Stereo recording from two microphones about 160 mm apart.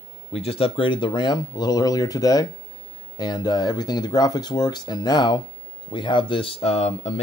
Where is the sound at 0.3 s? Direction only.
35° left (ahead or behind).